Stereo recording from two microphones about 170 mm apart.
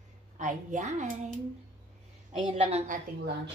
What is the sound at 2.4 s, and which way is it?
Speech, 35° right (ahead or behind).